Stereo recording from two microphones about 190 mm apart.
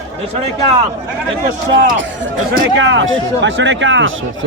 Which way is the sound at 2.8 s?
75° right (ahead or behind).